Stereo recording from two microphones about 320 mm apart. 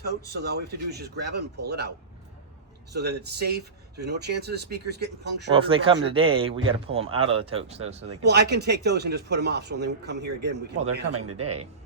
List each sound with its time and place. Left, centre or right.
0.0 s speech: right
2.9 s speech: right
5.5 s speech: centre
8.2 s speech: right
11.1 s speech: right